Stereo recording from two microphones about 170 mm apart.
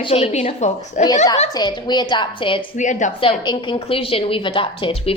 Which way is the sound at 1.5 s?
25° left (ahead or behind).